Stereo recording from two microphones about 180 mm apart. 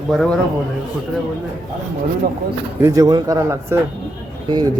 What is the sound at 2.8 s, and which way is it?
Speech, 15° right (ahead or behind).